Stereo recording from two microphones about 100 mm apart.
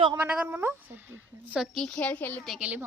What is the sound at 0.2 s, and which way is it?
Speech, 15° right (ahead or behind).